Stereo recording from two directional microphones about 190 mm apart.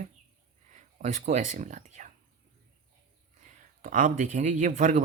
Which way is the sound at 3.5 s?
45° right (ahead or behind).